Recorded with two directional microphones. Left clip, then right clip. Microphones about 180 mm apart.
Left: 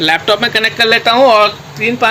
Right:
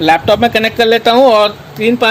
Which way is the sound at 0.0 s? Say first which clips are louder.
Right 2 dB; 50° right (ahead or behind).